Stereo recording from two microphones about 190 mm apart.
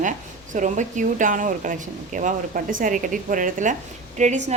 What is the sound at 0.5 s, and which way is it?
A woman's voice, 40° right (ahead or behind).